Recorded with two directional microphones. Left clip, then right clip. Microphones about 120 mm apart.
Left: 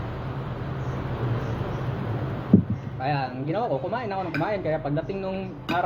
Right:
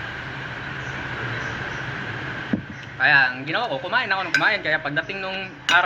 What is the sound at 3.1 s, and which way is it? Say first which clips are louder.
Speech: right 10 dB; 25° right (ahead or behind).